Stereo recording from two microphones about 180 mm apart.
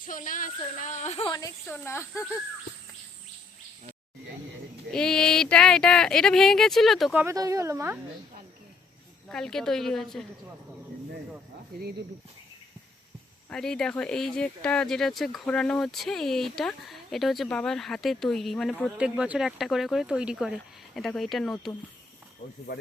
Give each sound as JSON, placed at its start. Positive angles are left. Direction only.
{"t": 0.0, "sound": "speech", "side_deg": 50}
{"t": 1.3, "sound": "a woman's voice", "side_deg": 20}
{"t": 1.6, "sound": "speech", "side_deg": 10}
{"t": 4.9, "sound": "speech", "side_deg": 5}
{"t": 7.3, "sound": "speech", "side_deg": -20}
{"t": 9.3, "sound": "speech", "side_deg": 5}
{"t": 13.5, "sound": "speech", "side_deg": 5}